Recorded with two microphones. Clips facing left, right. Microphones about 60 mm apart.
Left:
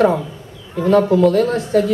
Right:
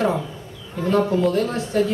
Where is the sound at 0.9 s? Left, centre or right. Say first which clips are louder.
Left 6 dB; left.